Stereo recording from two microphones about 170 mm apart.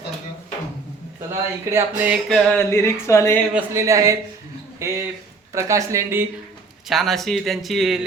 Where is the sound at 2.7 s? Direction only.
15° left (ahead or behind).